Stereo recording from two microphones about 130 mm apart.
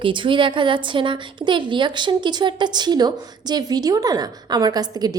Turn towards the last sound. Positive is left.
turn(degrees=-30)  # may be behind; listen again after turning